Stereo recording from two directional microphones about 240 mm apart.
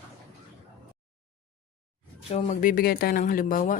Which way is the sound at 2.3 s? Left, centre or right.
Left.